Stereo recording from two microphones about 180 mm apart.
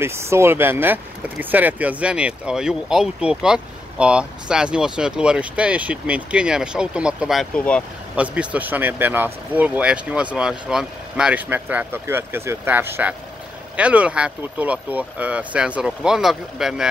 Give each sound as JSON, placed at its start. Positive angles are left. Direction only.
{"t": 0.0, "sound": "speech", "side_deg": -15}
{"t": 8.2, "sound": "speech", "side_deg": -5}